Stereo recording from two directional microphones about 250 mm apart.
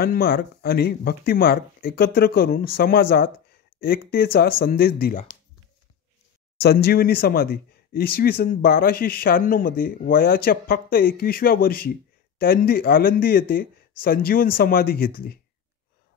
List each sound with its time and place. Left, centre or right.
0.0 s speech: left
6.6 s speech: left